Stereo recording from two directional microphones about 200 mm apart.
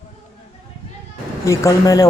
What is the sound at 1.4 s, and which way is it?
Speech, 15° left (ahead or behind).